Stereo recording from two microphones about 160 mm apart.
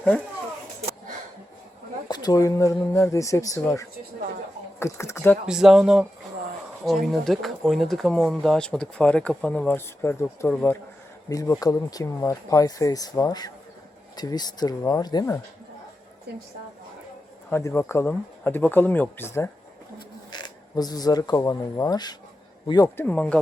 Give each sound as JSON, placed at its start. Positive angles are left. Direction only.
{"t": 2.0, "sound": "speech", "side_deg": 25}
{"t": 5.5, "sound": "speech", "side_deg": -5}
{"t": 11.3, "sound": "speech", "side_deg": 20}
{"t": 17.5, "sound": "speech", "side_deg": 15}
{"t": 20.3, "sound": "speech", "side_deg": 25}
{"t": 23.0, "sound": "speech", "side_deg": 10}